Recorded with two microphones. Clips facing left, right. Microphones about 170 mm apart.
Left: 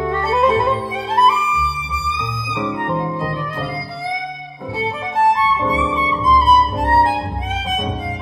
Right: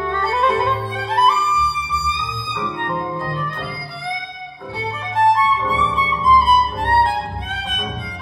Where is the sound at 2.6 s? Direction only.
Centre (ahead or behind).